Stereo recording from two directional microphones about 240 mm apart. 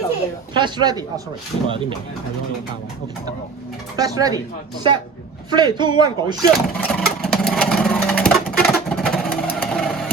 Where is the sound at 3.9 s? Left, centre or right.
Centre.